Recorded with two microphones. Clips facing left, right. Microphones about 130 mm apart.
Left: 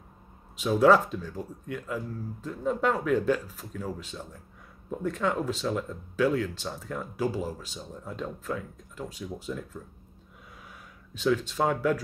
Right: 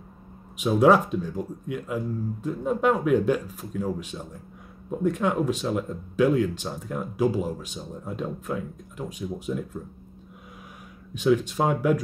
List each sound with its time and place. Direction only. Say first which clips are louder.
0.6 s speech: right 2 dB; 15° right (ahead or behind)
11.1 s speech: right 4 dB; 15° right (ahead or behind)